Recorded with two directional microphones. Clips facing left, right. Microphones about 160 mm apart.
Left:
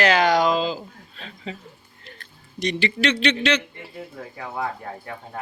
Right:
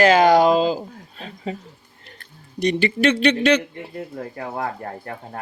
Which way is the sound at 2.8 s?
50° right (ahead or behind).